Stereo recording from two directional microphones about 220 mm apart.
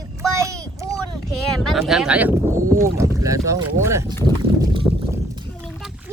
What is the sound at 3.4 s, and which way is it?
Speech, 15° right (ahead or behind).